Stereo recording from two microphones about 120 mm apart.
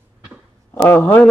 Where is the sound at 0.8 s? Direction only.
15° left (ahead or behind).